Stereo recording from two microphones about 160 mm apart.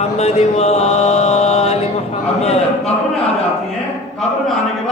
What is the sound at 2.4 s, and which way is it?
Speech, 40° left (ahead or behind).